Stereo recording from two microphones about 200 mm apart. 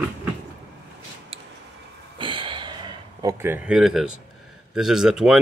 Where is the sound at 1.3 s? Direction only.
30° right (ahead or behind); by 4.1 s 5° right (ahead or behind).